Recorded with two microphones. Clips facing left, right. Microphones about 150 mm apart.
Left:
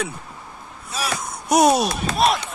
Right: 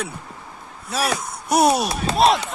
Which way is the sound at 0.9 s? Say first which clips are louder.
Right 4 dB; 70° right (ahead or behind).